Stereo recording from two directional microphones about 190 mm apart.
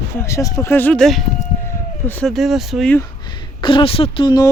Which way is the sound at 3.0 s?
20° left (ahead or behind).